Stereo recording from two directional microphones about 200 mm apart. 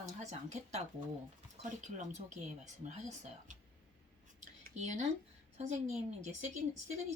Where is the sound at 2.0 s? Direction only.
35° right (ahead or behind).